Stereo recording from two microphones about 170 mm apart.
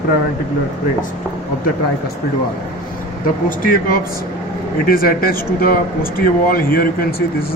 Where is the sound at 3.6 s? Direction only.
55° left (ahead or behind).